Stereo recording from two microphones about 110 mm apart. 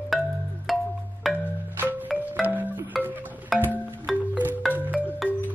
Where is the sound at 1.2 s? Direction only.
Centre (ahead or behind).